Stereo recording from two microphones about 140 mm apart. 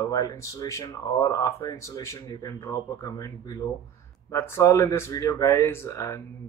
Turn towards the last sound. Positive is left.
turn(degrees=20)  # may be behind; listen again after turning